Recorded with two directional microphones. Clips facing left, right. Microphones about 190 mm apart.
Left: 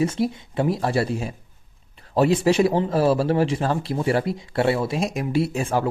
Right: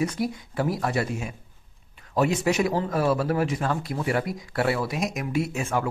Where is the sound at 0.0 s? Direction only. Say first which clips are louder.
Left 4 dB; 25° left (ahead or behind).